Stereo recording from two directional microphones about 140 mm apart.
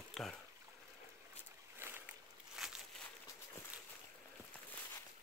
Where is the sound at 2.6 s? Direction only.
Centre (ahead or behind).